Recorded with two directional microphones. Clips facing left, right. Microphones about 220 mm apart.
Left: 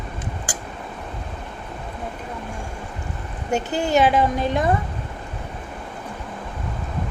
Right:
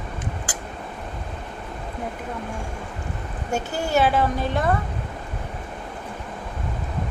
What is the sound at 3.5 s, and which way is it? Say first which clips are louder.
Speech: left 3 dB; 15° left (ahead or behind).